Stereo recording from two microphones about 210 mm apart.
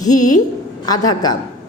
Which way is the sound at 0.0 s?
15° left (ahead or behind).